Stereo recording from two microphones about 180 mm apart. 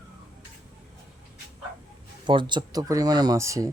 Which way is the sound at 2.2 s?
25° right (ahead or behind).